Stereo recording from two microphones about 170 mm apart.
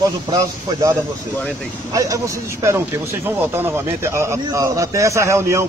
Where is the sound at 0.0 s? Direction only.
25° right (ahead or behind).